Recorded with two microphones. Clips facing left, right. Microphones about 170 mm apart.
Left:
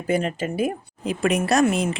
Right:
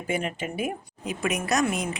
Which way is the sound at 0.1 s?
35° left (ahead or behind).